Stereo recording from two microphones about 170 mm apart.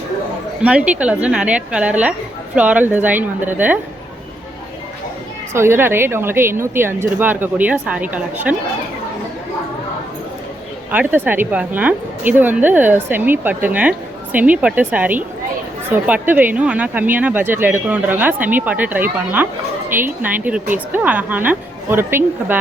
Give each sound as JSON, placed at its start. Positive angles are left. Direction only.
{"t": 0.6, "sound": "speech", "side_deg": -5}
{"t": 5.5, "sound": "speech", "side_deg": -15}
{"t": 10.9, "sound": "speech", "side_deg": -10}